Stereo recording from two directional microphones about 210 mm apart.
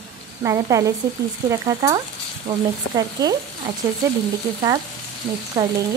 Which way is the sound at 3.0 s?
20° right (ahead or behind).